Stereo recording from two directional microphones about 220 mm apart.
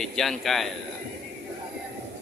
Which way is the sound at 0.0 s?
Centre (ahead or behind).